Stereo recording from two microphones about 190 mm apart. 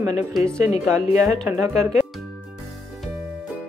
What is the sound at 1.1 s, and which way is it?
Speech, 15° right (ahead or behind).